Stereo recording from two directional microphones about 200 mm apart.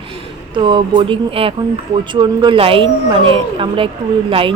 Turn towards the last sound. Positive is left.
turn(degrees=-25)  # may be behind; listen again after turning